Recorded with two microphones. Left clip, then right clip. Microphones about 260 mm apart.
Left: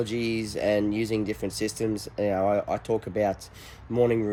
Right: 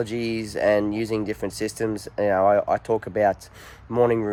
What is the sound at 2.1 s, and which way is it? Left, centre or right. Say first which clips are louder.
Speech: right 6 dB; right.